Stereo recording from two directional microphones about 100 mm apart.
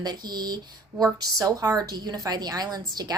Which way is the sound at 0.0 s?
45° right (ahead or behind).